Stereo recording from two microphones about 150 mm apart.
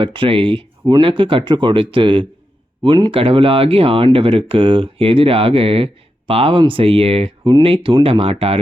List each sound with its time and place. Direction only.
0.0 s speech: 35° right (ahead or behind)